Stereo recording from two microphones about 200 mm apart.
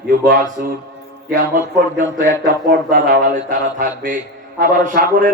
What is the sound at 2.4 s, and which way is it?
Mantra, 50° right (ahead or behind).